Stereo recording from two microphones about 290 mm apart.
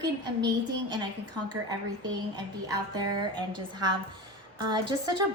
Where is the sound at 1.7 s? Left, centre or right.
Centre.